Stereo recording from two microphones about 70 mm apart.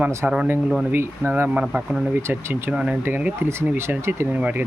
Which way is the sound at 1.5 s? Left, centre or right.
Centre.